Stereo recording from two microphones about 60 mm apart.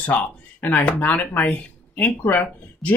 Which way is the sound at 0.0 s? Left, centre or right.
Left.